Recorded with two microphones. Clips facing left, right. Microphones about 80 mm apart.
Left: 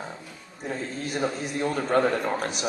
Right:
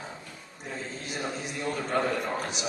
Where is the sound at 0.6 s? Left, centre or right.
Left.